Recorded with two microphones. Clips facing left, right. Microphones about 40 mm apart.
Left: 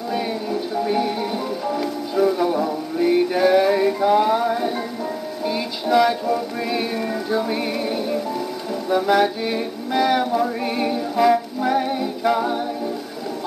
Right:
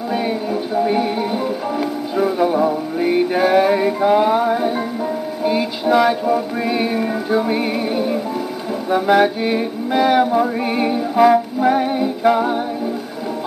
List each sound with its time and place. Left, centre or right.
0.1 s music: centre